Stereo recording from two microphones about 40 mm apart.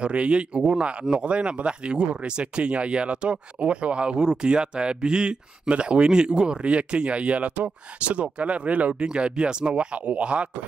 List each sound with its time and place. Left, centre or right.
0.0 s speech: right
9.0 s speech: right